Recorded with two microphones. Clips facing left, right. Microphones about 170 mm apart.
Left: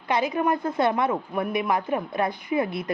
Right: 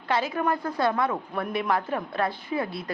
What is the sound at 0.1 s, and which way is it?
A woman's voice, 15° left (ahead or behind).